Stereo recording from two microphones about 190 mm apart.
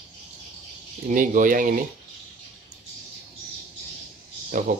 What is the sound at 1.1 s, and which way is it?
Speech, 45° right (ahead or behind).